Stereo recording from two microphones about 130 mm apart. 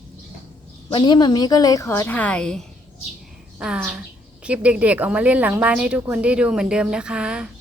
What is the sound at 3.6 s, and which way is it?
A woman's voice, 10° right (ahead or behind).